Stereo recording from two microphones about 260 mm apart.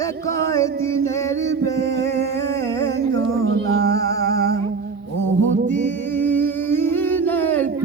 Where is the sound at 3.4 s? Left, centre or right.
Right.